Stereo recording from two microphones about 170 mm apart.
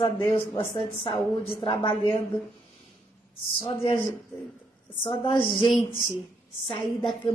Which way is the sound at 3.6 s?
30° left (ahead or behind).